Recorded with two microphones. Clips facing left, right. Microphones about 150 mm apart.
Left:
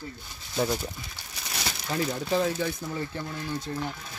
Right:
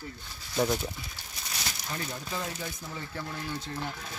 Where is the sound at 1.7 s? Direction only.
90° left.